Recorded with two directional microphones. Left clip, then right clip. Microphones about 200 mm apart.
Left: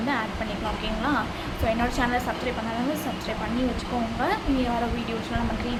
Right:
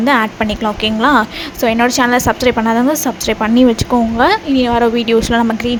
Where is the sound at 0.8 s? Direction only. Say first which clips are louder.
Right 16 dB; 50° right (ahead or behind).